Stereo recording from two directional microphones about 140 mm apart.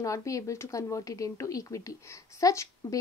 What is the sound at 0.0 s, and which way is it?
A woman's voice, 20° left (ahead or behind).